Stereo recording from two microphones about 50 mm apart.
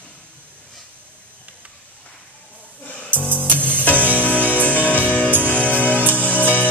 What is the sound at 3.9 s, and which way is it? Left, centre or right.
Music, left.